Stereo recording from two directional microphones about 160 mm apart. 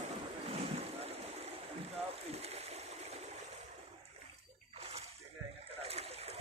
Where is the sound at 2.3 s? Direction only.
40° right (ahead or behind).